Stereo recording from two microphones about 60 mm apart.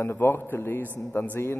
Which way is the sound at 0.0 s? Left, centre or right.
Left.